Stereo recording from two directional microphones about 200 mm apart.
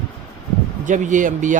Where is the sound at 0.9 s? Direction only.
40° right (ahead or behind).